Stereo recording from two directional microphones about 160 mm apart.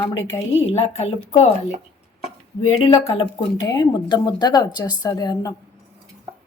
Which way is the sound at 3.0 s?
35° left (ahead or behind).